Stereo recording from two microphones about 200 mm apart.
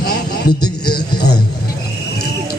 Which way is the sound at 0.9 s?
50° left (ahead or behind).